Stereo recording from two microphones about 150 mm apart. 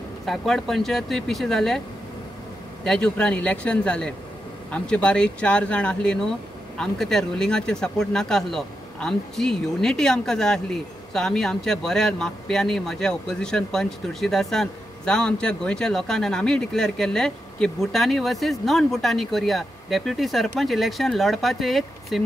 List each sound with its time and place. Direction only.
0.2 s speech: centre (ahead or behind)
2.8 s speech: 5° left (ahead or behind)